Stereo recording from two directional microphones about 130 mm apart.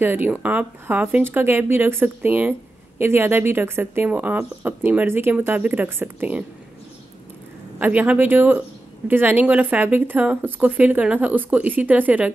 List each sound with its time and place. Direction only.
0.0 s speech: 15° right (ahead or behind)
7.8 s speech: 10° right (ahead or behind)